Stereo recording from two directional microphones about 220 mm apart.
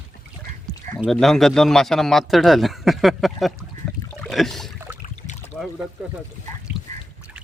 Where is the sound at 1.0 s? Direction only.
Centre (ahead or behind).